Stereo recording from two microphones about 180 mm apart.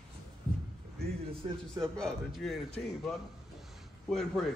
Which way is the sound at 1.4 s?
30° right (ahead or behind).